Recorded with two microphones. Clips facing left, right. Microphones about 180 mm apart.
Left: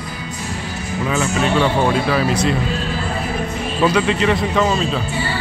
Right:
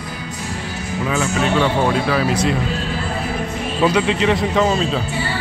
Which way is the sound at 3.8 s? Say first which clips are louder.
Even; 20° right (ahead or behind).